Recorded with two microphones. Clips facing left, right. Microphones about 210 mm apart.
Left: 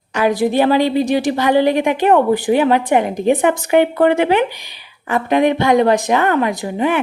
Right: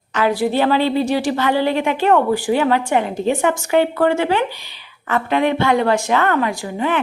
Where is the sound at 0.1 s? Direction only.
15° left (ahead or behind).